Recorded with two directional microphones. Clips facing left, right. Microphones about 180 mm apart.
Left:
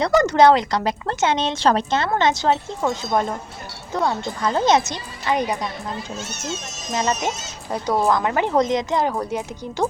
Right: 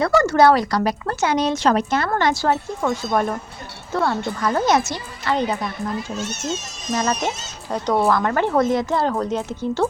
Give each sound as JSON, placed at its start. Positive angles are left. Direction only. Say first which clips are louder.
{"t": 0.0, "sound": "speech", "louder": "even", "side_deg": 20}
{"t": 7.1, "sound": "speech", "louder": "even", "side_deg": 10}